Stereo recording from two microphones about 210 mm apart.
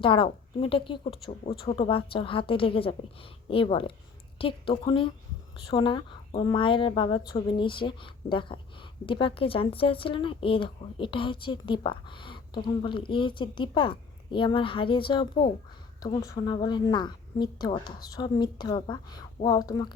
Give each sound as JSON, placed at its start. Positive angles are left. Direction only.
{"t": 0.0, "sound": "a woman's voice", "side_deg": 25}